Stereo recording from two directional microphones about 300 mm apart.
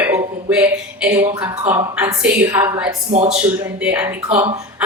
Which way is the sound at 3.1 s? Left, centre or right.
Right.